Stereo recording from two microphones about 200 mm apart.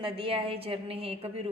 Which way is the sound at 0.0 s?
25° right (ahead or behind).